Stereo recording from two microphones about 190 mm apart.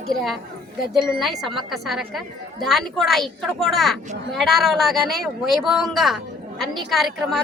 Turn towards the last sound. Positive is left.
turn(degrees=0)  # may be behind; listen again after turning